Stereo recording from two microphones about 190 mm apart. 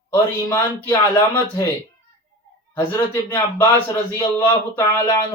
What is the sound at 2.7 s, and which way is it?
Speech, 10° left (ahead or behind).